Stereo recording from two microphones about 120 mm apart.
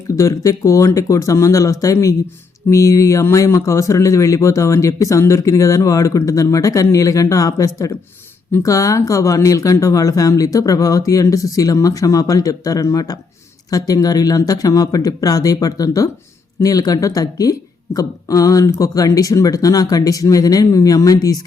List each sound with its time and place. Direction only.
0.2 s speech: 25° left (ahead or behind)